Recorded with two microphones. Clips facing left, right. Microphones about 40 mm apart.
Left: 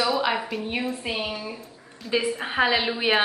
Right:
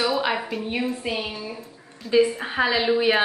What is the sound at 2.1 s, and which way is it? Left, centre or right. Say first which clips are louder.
A woman's voice: right 5 dB; centre.